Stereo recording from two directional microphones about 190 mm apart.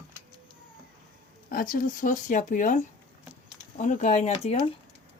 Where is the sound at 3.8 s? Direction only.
40° left (ahead or behind).